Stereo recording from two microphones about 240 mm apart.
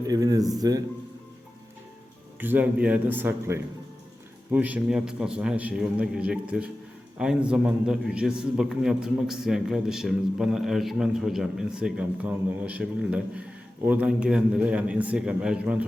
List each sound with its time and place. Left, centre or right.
0.1 s a man's voice: centre
2.4 s a man's voice: centre